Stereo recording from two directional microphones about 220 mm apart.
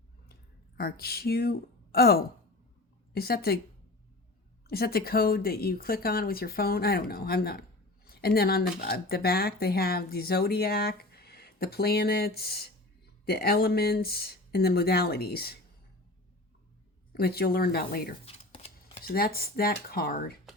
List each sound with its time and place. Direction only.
0.8 s speech: 45° left (ahead or behind)
4.7 s speech: 45° left (ahead or behind)
17.1 s speech: 45° left (ahead or behind)
18.3 s shuffling cards: 25° left (ahead or behind)
19.0 s speech: 45° left (ahead or behind)